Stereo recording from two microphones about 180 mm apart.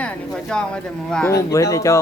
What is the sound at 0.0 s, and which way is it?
Speech, 5° left (ahead or behind).